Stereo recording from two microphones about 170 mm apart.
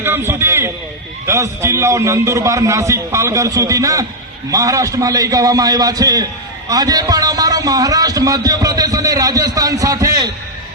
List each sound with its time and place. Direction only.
0.0 s a man's voice: 15° right (ahead or behind)